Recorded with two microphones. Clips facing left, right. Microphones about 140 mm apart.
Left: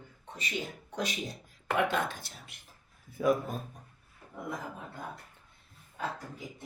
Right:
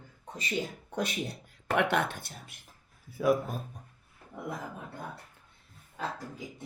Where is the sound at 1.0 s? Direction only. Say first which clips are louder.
Right 2 dB; 60° right (ahead or behind).